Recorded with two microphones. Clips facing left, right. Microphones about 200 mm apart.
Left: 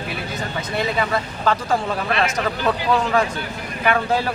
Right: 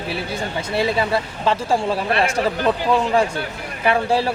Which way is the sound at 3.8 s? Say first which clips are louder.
Right 2 dB; 30° right (ahead or behind).